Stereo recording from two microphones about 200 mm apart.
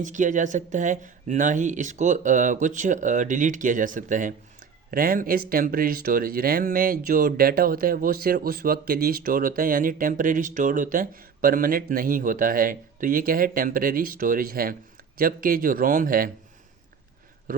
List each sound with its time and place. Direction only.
0.0 s speech: 40° right (ahead or behind)